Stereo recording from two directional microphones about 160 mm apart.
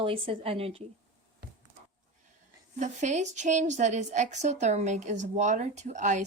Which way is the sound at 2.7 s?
50° right (ahead or behind).